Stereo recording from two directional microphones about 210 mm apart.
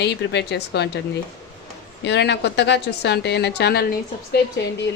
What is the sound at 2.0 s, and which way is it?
A woman's voice, 55° left (ahead or behind).